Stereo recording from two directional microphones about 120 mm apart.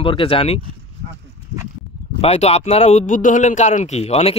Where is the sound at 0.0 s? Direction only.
45° left (ahead or behind).